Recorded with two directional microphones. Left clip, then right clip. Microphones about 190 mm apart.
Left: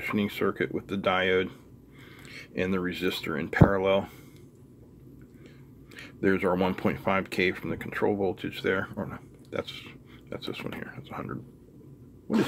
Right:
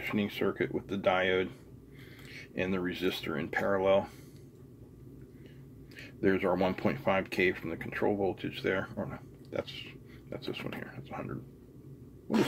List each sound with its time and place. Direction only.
0.0 s speech: 25° left (ahead or behind)
5.9 s speech: 25° left (ahead or behind)